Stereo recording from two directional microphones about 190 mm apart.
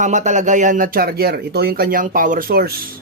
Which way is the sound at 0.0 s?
40° right (ahead or behind).